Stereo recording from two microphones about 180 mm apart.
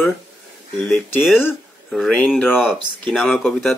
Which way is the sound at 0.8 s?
Centre (ahead or behind).